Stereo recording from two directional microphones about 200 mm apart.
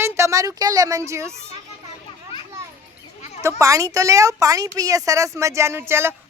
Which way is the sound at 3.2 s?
35° left (ahead or behind).